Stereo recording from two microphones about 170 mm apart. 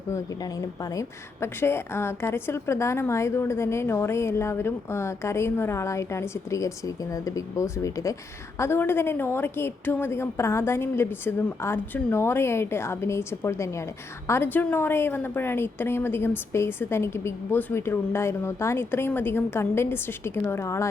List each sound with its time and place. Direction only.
0.1 s a woman's voice: 20° left (ahead or behind)